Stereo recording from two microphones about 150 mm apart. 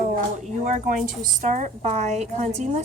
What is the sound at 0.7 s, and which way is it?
A woman's voice, 55° right (ahead or behind).